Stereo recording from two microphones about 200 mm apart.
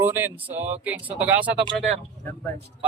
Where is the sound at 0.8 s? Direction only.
5° right (ahead or behind).